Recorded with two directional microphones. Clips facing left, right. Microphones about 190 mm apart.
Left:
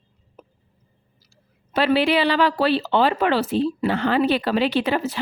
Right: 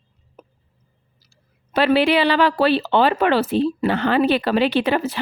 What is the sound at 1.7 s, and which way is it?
Speech, 65° right (ahead or behind).